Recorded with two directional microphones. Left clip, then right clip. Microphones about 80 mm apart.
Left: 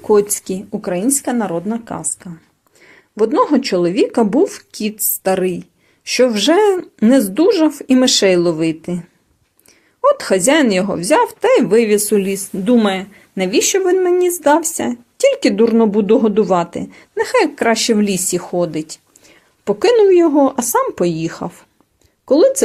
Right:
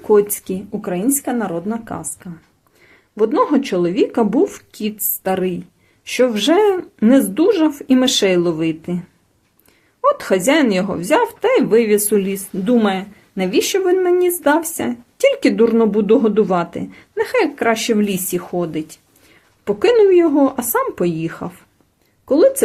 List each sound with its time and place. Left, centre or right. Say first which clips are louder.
0.1 s a woman's voice: left 1 dB; left
0.8 s speech: left 3 dB; left
1.1 s a woman's voice: left 2 dB; left
2.9 s a woman's voice: left 2 dB; left
12.7 s a woman's voice: left 2 dB; left